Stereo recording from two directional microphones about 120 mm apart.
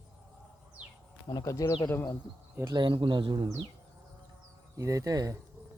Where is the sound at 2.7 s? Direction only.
40° right (ahead or behind).